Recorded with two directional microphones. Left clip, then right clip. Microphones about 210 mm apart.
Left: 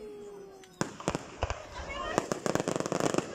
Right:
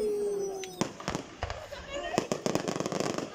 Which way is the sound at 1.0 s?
10° left (ahead or behind).